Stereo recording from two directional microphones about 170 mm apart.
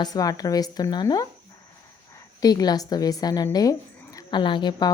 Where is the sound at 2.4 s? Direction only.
25° left (ahead or behind).